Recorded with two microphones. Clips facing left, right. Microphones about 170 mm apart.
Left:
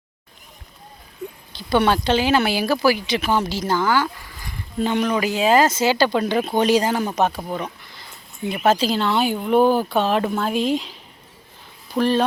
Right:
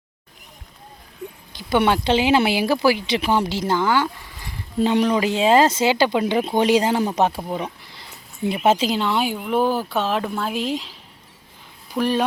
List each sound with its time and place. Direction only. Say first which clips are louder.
1.5 s speech: even; 20° right (ahead or behind)
7.4 s speech: right 1 dB; 10° right (ahead or behind)
7.8 s a sound: even; 30° right (ahead or behind)
8.4 s speech: even; 25° right (ahead or behind); by 10.9 s centre (ahead or behind)
11.9 s speech: left 2 dB; 10° right (ahead or behind)